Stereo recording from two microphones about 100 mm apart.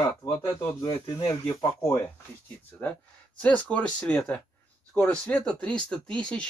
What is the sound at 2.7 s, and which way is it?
Speech, 15° left (ahead or behind).